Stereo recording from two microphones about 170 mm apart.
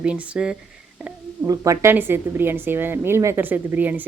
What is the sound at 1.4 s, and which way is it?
A woman's voice, 20° right (ahead or behind).